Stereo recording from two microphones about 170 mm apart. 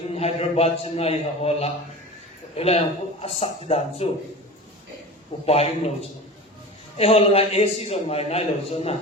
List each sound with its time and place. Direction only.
0.1 s a man's voice: 35° left (ahead or behind)
5.5 s a man's voice: 35° left (ahead or behind)